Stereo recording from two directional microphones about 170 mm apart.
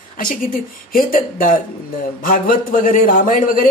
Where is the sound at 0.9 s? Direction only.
55° left (ahead or behind).